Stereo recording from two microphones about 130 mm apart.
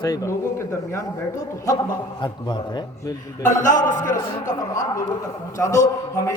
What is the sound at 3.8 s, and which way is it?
Speech, 80° left.